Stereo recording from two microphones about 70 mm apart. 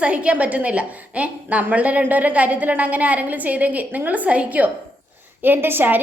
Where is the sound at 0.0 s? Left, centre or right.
Centre.